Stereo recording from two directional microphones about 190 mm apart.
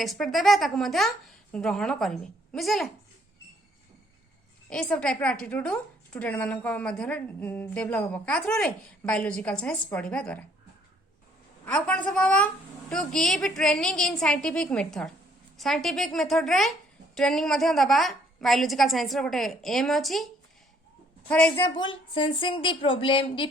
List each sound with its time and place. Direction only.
0.0 s a woman's voice: centre (ahead or behind)
4.7 s a woman's voice: 5° left (ahead or behind)
11.6 s a woman's voice: 5° left (ahead or behind)
21.8 s a woman's voice: 25° left (ahead or behind)